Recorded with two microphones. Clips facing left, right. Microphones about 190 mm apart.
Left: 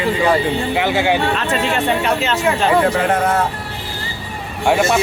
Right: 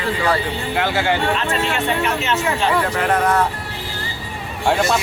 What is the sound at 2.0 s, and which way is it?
A man's voice, 35° left (ahead or behind).